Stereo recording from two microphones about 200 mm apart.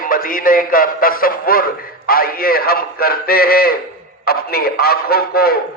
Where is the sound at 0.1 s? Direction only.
45° left (ahead or behind).